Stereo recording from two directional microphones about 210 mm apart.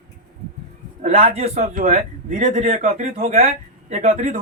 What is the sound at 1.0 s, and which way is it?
A man's voice, 35° right (ahead or behind).